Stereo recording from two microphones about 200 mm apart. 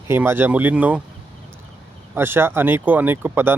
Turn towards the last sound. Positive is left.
turn(degrees=-10)  # may be behind; listen again after turning